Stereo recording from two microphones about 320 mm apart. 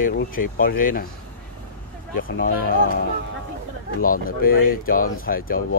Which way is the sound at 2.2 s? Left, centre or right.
Left.